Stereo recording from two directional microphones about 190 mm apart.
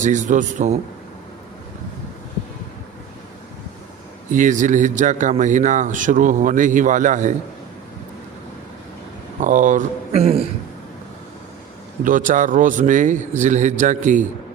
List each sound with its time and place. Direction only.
0.0 s a man's voice: 40° right (ahead or behind)
4.3 s a man's voice: 40° right (ahead or behind)
9.4 s a man's voice: 40° right (ahead or behind)
12.0 s speech: 45° right (ahead or behind)